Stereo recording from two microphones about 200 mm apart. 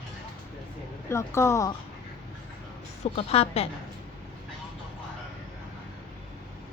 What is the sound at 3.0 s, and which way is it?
Speech, 30° left (ahead or behind).